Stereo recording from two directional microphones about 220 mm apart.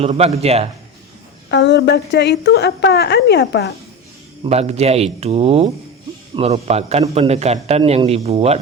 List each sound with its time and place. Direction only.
0.0 s a man's voice: 30° right (ahead or behind)
1.5 s a woman's voice: 50° left (ahead or behind)
4.4 s a man's voice: 30° right (ahead or behind)